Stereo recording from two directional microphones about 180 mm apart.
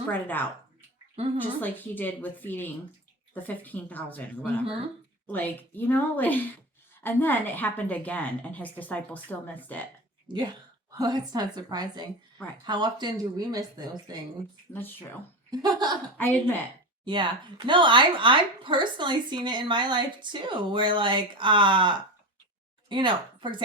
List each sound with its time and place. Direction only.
0.1 s a woman's voice: 10° left (ahead or behind)
10.2 s speech: 25° right (ahead or behind)
14.7 s a woman's voice: 10° left (ahead or behind)
15.4 s speech: 20° right (ahead or behind)
16.1 s a woman's voice: 10° left (ahead or behind)
17.1 s speech: 25° right (ahead or behind)